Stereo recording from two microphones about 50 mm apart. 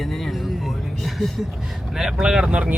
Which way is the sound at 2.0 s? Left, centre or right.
Centre.